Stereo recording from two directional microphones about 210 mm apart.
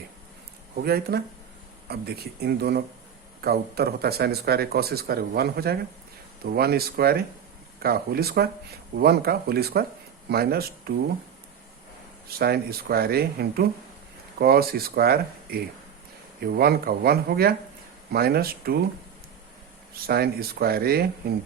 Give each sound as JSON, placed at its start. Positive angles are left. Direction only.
{"t": 0.8, "sound": "speech", "side_deg": -50}
{"t": 12.3, "sound": "speech", "side_deg": -45}
{"t": 19.9, "sound": "speech", "side_deg": -45}